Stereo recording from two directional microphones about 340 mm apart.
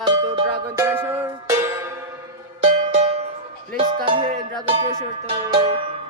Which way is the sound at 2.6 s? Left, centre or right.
Centre.